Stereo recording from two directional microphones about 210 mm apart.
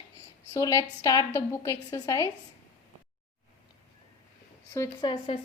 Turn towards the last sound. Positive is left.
turn(degrees=20)  # may be behind; listen again after turning